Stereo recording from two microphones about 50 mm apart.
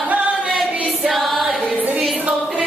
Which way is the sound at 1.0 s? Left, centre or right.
Centre.